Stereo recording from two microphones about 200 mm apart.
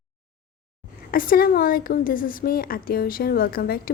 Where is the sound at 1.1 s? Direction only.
45° left (ahead or behind).